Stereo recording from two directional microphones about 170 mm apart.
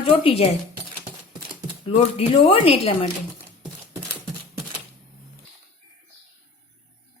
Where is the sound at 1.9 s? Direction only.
35° left (ahead or behind).